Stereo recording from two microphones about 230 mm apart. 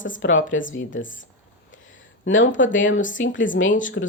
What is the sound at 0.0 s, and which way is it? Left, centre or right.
Speech, left.